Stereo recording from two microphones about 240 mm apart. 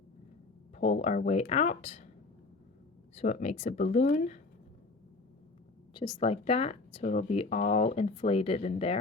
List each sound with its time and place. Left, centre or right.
0.8 s speech: left
3.2 s speech: left
5.9 s speech: centre